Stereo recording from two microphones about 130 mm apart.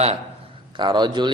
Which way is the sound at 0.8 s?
35° right (ahead or behind).